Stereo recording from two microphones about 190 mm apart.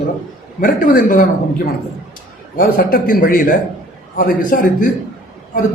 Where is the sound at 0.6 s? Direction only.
45° left (ahead or behind).